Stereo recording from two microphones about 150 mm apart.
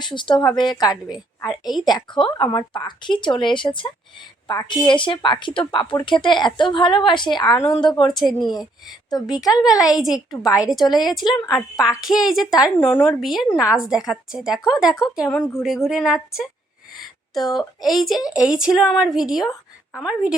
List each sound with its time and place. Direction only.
0.0 s speech: 30° left (ahead or behind)
2.1 s speech: 35° left (ahead or behind)
12.0 s a woman's voice: 5° right (ahead or behind)
17.0 s a sound: centre (ahead or behind)
17.8 s a woman's voice: centre (ahead or behind)
18.2 s speech: 25° left (ahead or behind)
18.4 s a woman's voice: 5° right (ahead or behind)